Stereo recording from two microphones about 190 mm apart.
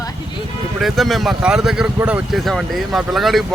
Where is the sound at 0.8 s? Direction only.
Centre (ahead or behind).